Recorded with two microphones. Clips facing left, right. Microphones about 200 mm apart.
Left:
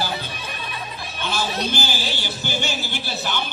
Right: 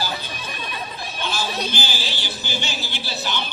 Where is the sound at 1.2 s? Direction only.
50° left (ahead or behind).